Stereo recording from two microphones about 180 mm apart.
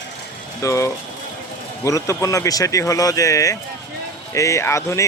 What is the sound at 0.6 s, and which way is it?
Speech, 15° left (ahead or behind).